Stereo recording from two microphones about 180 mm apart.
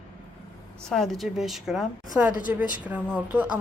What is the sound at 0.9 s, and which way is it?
A woman's voice, centre (ahead or behind).